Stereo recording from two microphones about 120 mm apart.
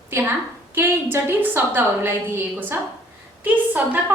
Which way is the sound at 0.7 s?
20° right (ahead or behind).